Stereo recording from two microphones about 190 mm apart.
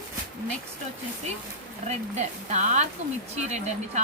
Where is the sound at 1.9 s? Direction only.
40° right (ahead or behind).